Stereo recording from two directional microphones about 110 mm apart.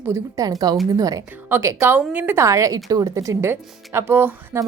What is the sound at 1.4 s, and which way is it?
A woman's voice, 20° right (ahead or behind).